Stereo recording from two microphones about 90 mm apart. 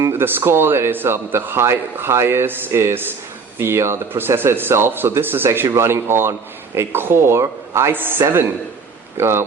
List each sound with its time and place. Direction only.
0.0 s speech: 25° right (ahead or behind)